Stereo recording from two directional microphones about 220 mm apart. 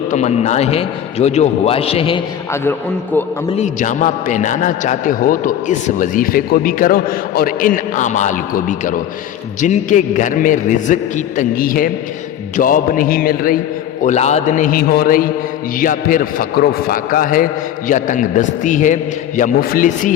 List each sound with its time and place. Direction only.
0.1 s a man's voice: 30° left (ahead or behind)
3.6 s a man's voice: 35° left (ahead or behind)